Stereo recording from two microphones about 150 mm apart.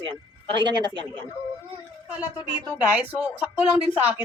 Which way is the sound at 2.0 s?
10° right (ahead or behind).